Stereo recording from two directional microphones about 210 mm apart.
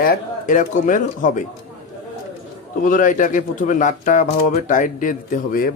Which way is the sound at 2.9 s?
40° left (ahead or behind).